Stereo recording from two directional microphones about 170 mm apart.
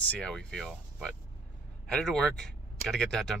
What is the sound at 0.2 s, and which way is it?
Speech, 5° left (ahead or behind).